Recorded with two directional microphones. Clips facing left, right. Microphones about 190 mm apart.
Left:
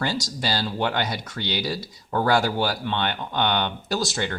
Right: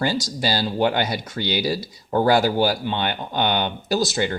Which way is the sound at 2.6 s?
15° right (ahead or behind).